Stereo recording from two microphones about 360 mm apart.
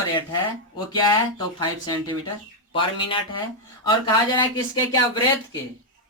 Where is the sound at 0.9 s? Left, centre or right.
Centre.